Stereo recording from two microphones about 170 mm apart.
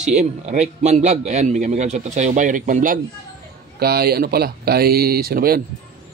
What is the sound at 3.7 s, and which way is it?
Speech, 65° right (ahead or behind).